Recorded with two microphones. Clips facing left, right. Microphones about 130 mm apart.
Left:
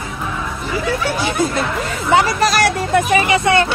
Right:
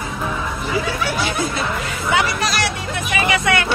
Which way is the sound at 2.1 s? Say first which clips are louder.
Left 6 dB; 40° left (ahead or behind).